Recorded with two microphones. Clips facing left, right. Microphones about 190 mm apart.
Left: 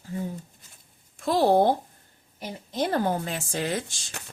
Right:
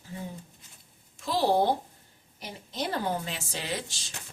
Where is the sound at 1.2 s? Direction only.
55° left (ahead or behind).